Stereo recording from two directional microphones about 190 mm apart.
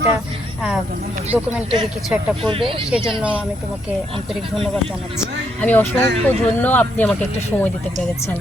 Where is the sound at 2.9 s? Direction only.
Centre (ahead or behind).